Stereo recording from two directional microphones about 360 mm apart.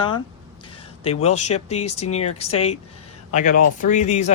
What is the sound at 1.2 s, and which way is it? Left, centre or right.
Speech, centre.